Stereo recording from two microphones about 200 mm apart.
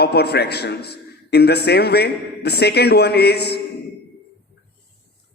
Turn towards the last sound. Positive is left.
turn(degrees=55)  # may be behind; listen again after turning